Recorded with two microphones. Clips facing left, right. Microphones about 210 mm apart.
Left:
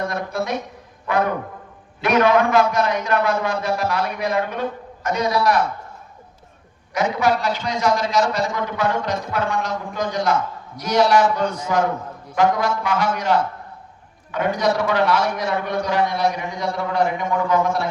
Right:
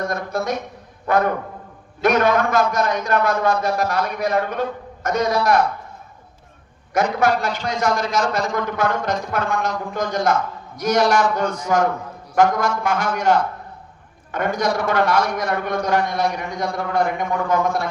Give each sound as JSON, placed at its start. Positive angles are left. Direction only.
{"t": 0.1, "sound": "a sound", "side_deg": -45}
{"t": 1.0, "sound": "a man's voice", "side_deg": -45}
{"t": 6.9, "sound": "a man's voice", "side_deg": -50}